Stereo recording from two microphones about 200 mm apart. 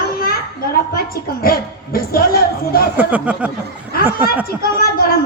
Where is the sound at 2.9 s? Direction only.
10° right (ahead or behind).